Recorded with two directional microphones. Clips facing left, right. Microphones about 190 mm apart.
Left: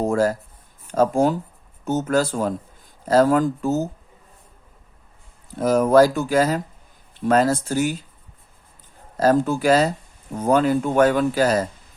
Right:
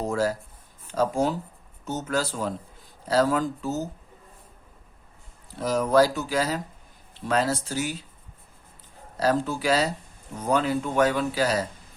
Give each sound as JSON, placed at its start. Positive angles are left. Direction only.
{"t": 0.0, "sound": "speech", "side_deg": 50}
{"t": 5.5, "sound": "speech", "side_deg": 50}
{"t": 9.1, "sound": "speech", "side_deg": 50}